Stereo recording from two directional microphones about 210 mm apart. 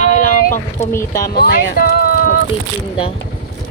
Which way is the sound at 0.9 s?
15° left (ahead or behind).